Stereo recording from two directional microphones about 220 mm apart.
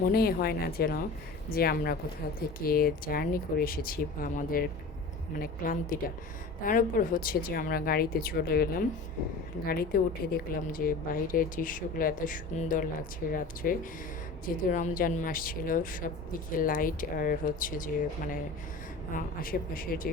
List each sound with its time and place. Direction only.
0.0 s speech: 45° left (ahead or behind)
19.1 s speech: 40° left (ahead or behind)